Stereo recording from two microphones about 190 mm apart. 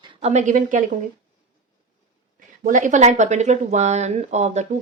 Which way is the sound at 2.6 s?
40° right (ahead or behind).